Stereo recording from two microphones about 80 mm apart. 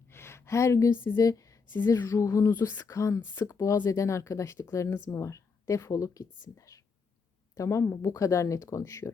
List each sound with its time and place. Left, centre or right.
0.1 s speech: left
1.2 s speech: left
2.5 s speech: left